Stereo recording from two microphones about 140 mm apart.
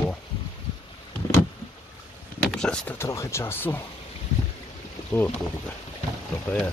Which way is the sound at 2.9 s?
20° left (ahead or behind).